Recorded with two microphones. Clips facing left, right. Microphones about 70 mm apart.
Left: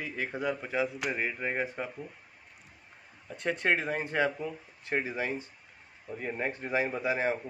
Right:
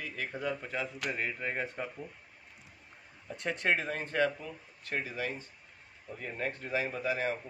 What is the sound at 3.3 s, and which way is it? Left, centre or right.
Speech, centre.